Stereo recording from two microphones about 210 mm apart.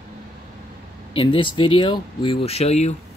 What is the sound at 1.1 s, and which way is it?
Speech, 25° left (ahead or behind).